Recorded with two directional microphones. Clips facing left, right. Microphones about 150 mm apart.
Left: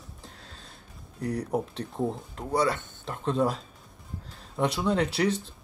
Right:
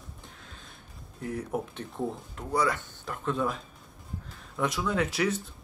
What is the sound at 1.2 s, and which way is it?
Speech, 40° left (ahead or behind).